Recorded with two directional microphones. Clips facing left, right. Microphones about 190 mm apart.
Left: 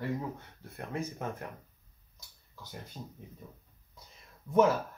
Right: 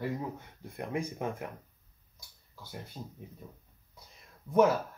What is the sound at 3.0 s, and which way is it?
Speech, 15° right (ahead or behind).